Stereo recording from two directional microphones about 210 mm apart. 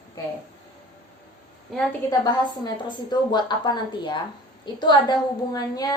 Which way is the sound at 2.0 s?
20° left (ahead or behind).